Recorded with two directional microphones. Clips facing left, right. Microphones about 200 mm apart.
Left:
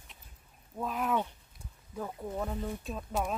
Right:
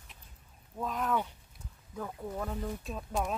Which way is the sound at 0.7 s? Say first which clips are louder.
Left 1 dB; 5° left (ahead or behind).